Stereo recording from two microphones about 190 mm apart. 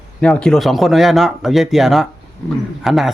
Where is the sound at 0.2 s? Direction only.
5° left (ahead or behind).